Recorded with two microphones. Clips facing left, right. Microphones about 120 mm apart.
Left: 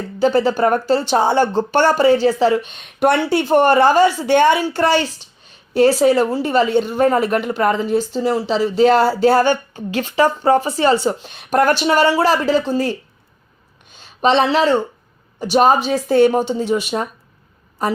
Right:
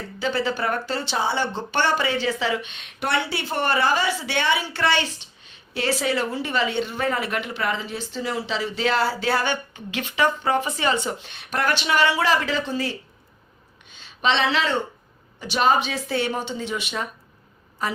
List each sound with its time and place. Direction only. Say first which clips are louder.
0.2 s a woman's voice: left 10 dB; 40° left (ahead or behind)